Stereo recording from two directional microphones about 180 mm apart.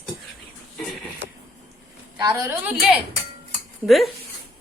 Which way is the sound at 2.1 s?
25° right (ahead or behind).